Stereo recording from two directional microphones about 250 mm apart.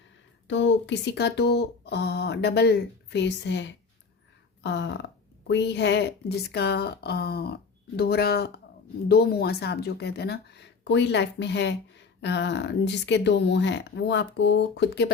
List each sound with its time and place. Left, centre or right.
0.4 s a woman's voice: left